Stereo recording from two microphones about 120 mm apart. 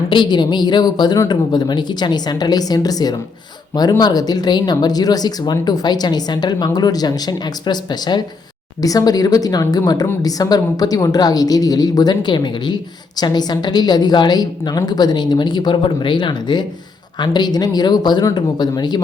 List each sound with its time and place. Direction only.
0.1 s a woman's voice: 40° left (ahead or behind)